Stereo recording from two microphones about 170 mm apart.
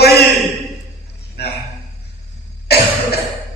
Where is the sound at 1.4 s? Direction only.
70° left (ahead or behind).